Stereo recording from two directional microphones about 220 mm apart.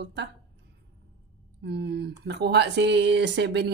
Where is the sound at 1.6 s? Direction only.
50° right (ahead or behind).